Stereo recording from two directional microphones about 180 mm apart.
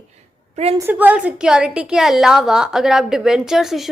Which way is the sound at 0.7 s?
10° right (ahead or behind).